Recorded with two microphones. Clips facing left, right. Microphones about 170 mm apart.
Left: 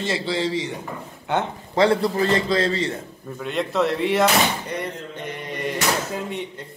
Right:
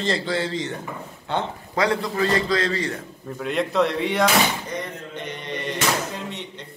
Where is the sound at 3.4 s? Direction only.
Centre (ahead or behind).